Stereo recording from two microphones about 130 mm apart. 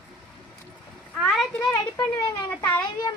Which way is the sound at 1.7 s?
25° left (ahead or behind).